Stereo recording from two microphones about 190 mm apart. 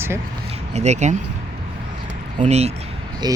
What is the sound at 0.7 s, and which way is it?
Speech, 35° right (ahead or behind).